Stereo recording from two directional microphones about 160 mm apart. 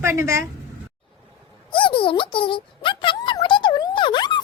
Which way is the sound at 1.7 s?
30° left (ahead or behind).